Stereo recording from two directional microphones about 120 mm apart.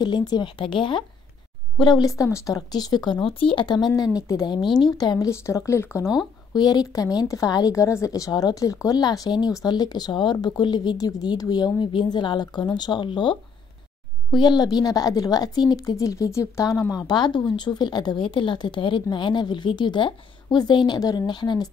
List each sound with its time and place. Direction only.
0.0 s a woman's voice: 35° left (ahead or behind)
6.5 s a woman's voice: 35° left (ahead or behind)